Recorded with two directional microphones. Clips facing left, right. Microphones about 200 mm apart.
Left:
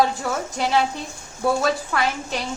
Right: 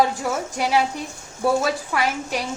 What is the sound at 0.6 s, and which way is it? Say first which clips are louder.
A woman's voice: even; 10° right (ahead or behind).